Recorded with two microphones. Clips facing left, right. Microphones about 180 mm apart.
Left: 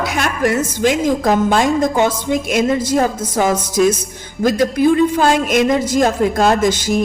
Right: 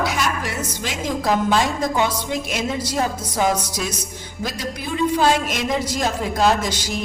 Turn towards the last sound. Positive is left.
turn(degrees=50)  # may be behind; listen again after turning